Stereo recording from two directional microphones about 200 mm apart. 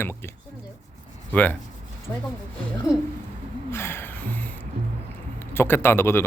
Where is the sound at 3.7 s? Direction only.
10° left (ahead or behind).